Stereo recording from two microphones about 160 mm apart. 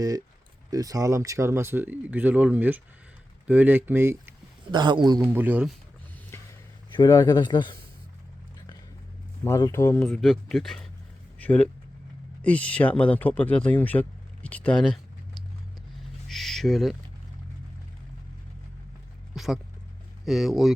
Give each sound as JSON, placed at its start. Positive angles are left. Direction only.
{"t": 0.7, "sound": "speech", "side_deg": -20}
{"t": 4.7, "sound": "speech", "side_deg": -30}
{"t": 5.3, "sound": "speech", "side_deg": -10}
{"t": 6.9, "sound": "speech", "side_deg": 25}
{"t": 9.4, "sound": "speech", "side_deg": 20}
{"t": 10.0, "sound": "speech", "side_deg": 0}
{"t": 16.3, "sound": "speech", "side_deg": 0}
{"t": 19.3, "sound": "a sound", "side_deg": 0}
{"t": 20.2, "sound": "speech", "side_deg": 0}